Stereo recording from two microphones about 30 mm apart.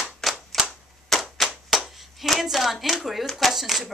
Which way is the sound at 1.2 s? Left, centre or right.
Centre.